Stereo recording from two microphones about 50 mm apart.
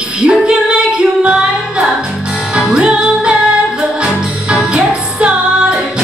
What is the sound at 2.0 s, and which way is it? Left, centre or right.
Music, centre.